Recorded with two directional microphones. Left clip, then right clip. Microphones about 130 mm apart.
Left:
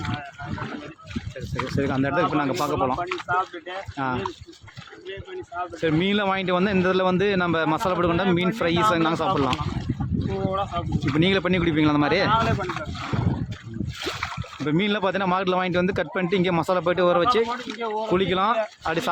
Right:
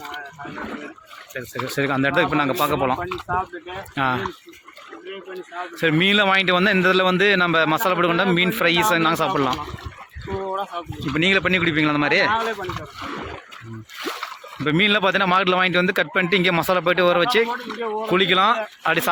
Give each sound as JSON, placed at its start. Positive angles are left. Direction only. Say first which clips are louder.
{"t": 1.7, "sound": "speech", "louder": "right 4 dB", "side_deg": 5}
{"t": 3.3, "sound": "speech", "louder": "even", "side_deg": 20}
{"t": 3.9, "sound": "speech", "louder": "right 6 dB", "side_deg": 5}
{"t": 5.8, "sound": "a man's voice", "louder": "right 6 dB", "side_deg": 10}
{"t": 10.5, "sound": "speech", "louder": "left 1 dB", "side_deg": 25}
{"t": 14.6, "sound": "a man's voice", "louder": "right 6 dB", "side_deg": 10}